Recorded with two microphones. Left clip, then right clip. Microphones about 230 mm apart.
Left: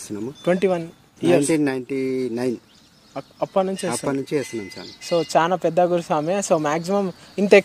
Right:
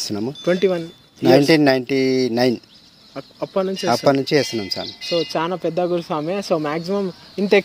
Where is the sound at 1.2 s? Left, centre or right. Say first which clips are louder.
Right 5 dB; right.